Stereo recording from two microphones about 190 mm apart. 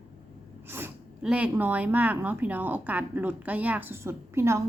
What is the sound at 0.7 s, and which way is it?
A woman's voice, 10° right (ahead or behind).